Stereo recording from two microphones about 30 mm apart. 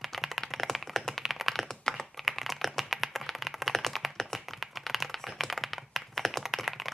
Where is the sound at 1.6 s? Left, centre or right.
Centre.